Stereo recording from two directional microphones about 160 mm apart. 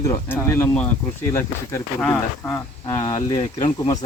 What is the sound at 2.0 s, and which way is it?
Speech, 5° left (ahead or behind).